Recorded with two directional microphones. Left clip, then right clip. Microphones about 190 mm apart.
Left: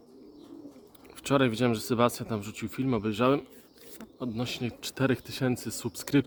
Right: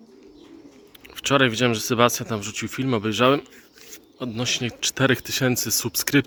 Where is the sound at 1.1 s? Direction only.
5° right (ahead or behind).